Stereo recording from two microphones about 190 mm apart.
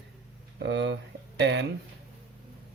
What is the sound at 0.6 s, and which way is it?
Mantra, 65° right (ahead or behind).